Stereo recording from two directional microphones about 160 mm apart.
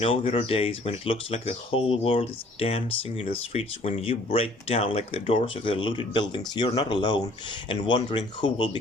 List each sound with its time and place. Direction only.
0.0 s speech: 35° left (ahead or behind)